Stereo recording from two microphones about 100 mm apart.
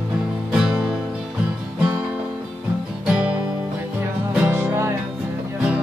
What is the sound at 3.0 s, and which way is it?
Music, 10° right (ahead or behind).